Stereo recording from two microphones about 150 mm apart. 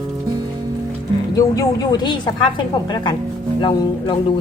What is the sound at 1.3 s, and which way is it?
A woman's voice, 25° left (ahead or behind).